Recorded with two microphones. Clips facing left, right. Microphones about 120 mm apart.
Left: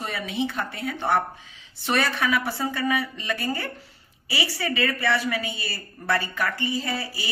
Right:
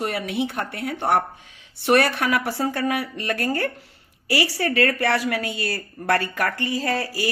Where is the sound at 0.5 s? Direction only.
65° right (ahead or behind).